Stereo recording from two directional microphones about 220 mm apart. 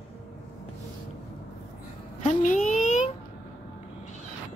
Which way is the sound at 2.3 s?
35° left (ahead or behind).